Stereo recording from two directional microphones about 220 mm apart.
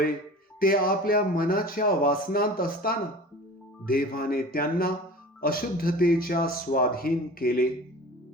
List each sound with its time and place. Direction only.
0.6 s speech: 40° left (ahead or behind)